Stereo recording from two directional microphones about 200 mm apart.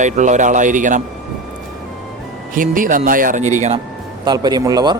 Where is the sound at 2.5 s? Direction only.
40° right (ahead or behind).